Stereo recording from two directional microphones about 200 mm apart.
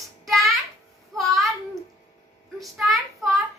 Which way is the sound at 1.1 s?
Centre (ahead or behind).